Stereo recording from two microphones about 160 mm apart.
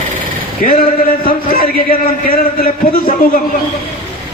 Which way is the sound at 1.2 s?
65° left (ahead or behind).